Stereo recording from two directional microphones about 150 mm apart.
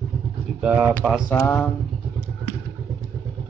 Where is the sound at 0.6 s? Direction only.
10° right (ahead or behind).